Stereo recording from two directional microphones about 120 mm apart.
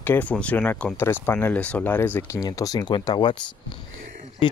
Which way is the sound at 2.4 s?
30° left (ahead or behind).